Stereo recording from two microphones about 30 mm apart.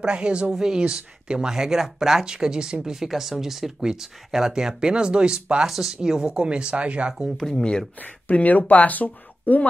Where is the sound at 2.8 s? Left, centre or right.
Centre.